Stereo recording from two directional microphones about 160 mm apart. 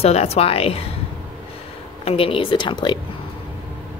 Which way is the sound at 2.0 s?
35° left (ahead or behind).